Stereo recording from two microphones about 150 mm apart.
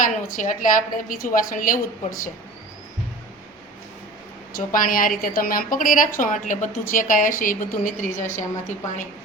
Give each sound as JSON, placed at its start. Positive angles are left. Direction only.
{"t": 0.0, "sound": "a woman's voice", "side_deg": 60}
{"t": 4.5, "sound": "a woman's voice", "side_deg": 65}